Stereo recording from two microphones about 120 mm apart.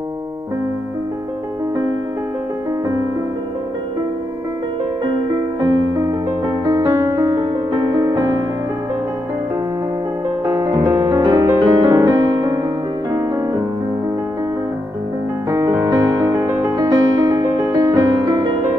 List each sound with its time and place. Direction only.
5.6 s music: 30° right (ahead or behind)
10.6 s music: 30° right (ahead or behind)
11.2 s music: 35° right (ahead or behind)
15.7 s music: 25° right (ahead or behind)